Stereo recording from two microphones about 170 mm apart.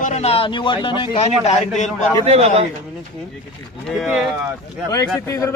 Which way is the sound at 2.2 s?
40° right (ahead or behind).